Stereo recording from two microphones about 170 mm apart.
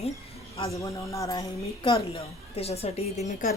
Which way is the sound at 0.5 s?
20° left (ahead or behind).